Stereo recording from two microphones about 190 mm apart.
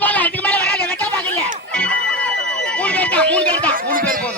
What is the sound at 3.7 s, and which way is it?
Speech, 50° right (ahead or behind).